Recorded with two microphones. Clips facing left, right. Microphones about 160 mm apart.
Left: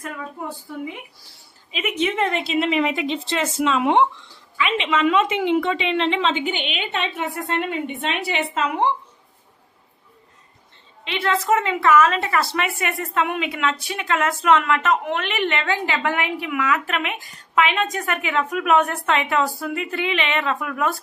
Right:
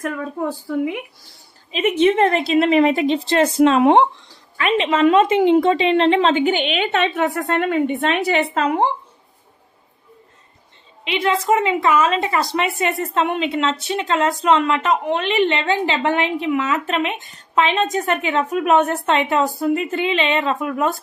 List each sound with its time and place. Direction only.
0.0 s a woman's voice: 65° right (ahead or behind)
1.7 s a woman's voice: 35° right (ahead or behind)
2.3 s a woman's voice: 45° right (ahead or behind)
11.1 s a woman's voice: 15° right (ahead or behind)